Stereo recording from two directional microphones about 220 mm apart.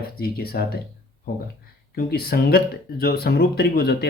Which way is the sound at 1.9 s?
45° left (ahead or behind).